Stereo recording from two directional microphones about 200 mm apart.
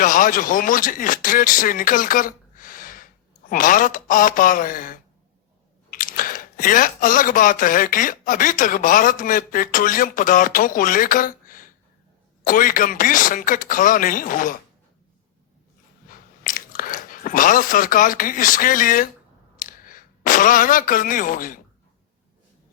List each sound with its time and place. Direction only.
0.0 s speech: 45° left (ahead or behind)
16.0 s biting: 45° left (ahead or behind)
19.5 s speech: 45° left (ahead or behind)